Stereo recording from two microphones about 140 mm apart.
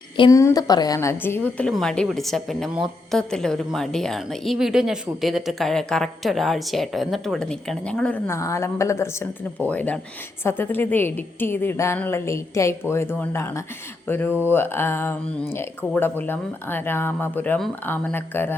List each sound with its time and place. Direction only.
0.3 s a woman's voice: 25° left (ahead or behind); by 8.2 s 5° left (ahead or behind)
8.3 s a woman's voice: 20° left (ahead or behind)